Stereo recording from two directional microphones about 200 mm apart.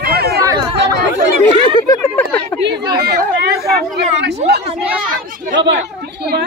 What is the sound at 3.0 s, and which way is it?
Speech, 55° right (ahead or behind).